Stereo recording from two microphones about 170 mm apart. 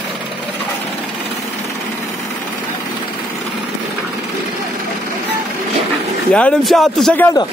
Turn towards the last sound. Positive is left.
turn(degrees=20)  # may be behind; listen again after turning